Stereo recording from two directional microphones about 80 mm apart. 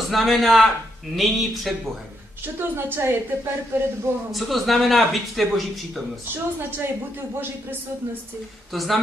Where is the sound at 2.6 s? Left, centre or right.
Right.